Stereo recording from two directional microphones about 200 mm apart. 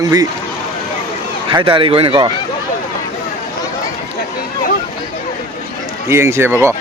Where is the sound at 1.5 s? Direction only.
25° right (ahead or behind).